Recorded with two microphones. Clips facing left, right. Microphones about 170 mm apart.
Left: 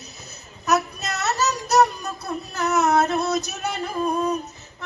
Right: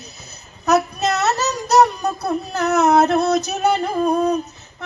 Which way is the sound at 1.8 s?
55° right (ahead or behind).